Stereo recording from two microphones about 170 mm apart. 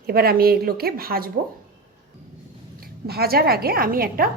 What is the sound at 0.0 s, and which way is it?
A woman's voice, 65° right (ahead or behind).